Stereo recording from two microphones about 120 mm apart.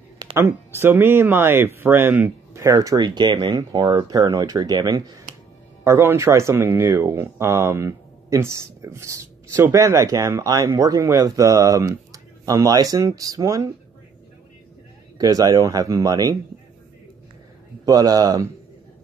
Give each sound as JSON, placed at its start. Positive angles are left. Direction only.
{"t": 0.3, "sound": "speech", "side_deg": -20}
{"t": 5.9, "sound": "speech", "side_deg": -20}
{"t": 15.1, "sound": "speech", "side_deg": -30}
{"t": 17.8, "sound": "speech", "side_deg": -30}